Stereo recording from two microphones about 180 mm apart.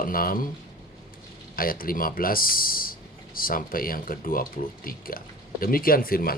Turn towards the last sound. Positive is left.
turn(degrees=55)  # may be behind; listen again after turning